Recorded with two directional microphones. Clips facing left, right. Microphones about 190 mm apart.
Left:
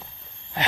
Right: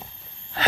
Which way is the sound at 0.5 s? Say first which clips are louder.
Right 3 dB; 15° left (ahead or behind).